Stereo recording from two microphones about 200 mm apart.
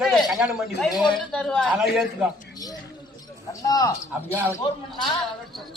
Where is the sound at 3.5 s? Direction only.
20° left (ahead or behind).